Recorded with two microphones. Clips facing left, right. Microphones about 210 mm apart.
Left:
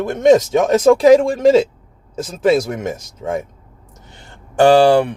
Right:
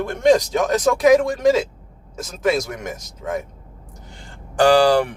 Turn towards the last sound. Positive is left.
turn(degrees=25)  # may be behind; listen again after turning